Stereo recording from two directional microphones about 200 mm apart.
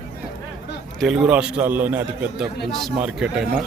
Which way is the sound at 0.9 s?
Centre (ahead or behind).